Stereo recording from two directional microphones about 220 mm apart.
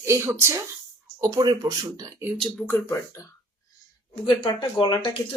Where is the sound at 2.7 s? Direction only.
10° left (ahead or behind).